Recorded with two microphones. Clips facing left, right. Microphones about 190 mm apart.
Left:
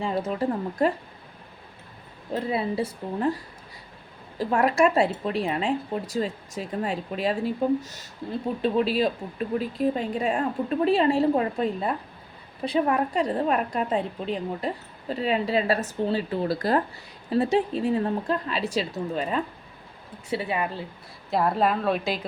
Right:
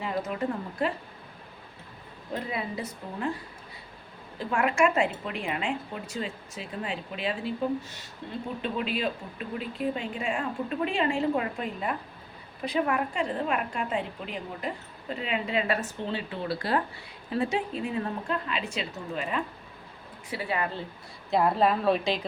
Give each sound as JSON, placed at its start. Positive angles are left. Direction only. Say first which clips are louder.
{"t": 0.0, "sound": "a woman's voice", "louder": "left 4 dB", "side_deg": 30}
{"t": 2.3, "sound": "a woman's voice", "louder": "left 6 dB", "side_deg": 30}
{"t": 4.4, "sound": "a woman's voice", "louder": "left 4 dB", "side_deg": 40}
{"t": 20.3, "sound": "a woman's voice", "louder": "left 4 dB", "side_deg": 20}
{"t": 21.2, "sound": "a woman's voice", "louder": "even", "side_deg": 0}